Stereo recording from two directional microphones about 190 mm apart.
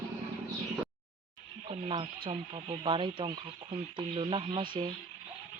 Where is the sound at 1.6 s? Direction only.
30° right (ahead or behind).